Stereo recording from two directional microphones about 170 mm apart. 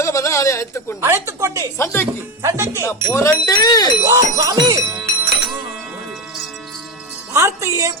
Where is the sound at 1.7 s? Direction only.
15° left (ahead or behind).